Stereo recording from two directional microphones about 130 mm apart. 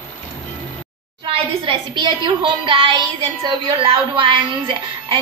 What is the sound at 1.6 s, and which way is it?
A woman's voice, 40° right (ahead or behind).